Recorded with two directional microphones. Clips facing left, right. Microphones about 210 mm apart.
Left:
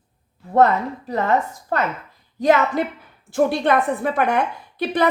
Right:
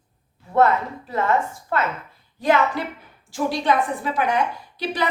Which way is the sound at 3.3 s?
60° left (ahead or behind).